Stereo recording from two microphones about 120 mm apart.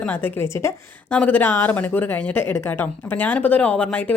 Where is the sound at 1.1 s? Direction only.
10° left (ahead or behind).